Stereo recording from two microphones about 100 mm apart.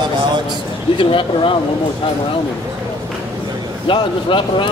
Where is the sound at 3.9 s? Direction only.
55° left (ahead or behind).